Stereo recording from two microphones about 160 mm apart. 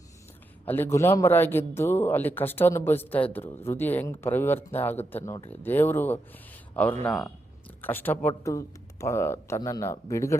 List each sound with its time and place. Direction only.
0.6 s a man's voice: 15° left (ahead or behind)